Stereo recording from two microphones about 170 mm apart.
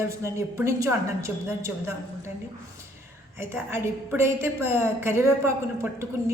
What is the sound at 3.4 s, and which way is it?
Speech, 15° right (ahead or behind).